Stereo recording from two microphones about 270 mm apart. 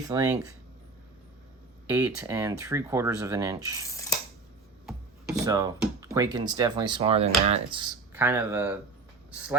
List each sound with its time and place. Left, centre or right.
0.1 s speech: centre
1.9 s speech: centre
5.4 s speech: centre
8.1 s speech: centre